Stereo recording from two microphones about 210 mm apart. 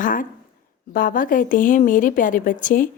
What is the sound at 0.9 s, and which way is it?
A woman's voice, 40° left (ahead or behind).